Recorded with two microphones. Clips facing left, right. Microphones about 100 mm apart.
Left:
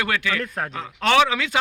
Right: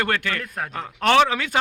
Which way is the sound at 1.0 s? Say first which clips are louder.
Right 1 dB; 45° right (ahead or behind).